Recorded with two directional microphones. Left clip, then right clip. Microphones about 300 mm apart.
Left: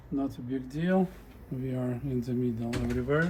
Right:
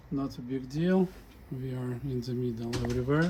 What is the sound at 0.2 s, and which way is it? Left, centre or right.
Speech, right.